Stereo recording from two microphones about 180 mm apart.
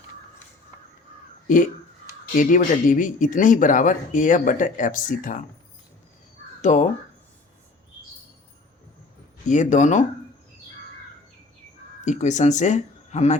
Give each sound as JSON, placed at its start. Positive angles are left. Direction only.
{"t": 1.5, "sound": "speech", "side_deg": 45}
{"t": 6.6, "sound": "speech", "side_deg": 40}
{"t": 9.5, "sound": "speech", "side_deg": 45}
{"t": 12.0, "sound": "speech", "side_deg": 40}